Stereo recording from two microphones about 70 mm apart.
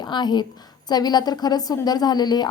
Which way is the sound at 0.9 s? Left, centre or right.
Left.